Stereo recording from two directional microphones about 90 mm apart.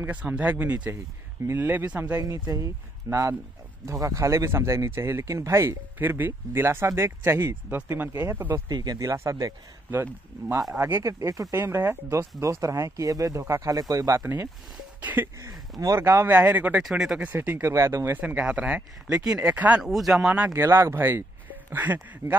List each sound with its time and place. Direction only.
0.0 s speech: 15° right (ahead or behind)
2.2 s speech: 45° right (ahead or behind); by 8.6 s 25° right (ahead or behind)
8.6 s speech: 50° right (ahead or behind)
14.2 s speech: 25° right (ahead or behind)
16.8 s speech: 5° right (ahead or behind)
17.2 s speech: 20° right (ahead or behind)
18.2 s speech: 15° right (ahead or behind)
19.8 s speech: centre (ahead or behind)
20.2 s speech: 15° right (ahead or behind)
22.2 s speech: 50° right (ahead or behind)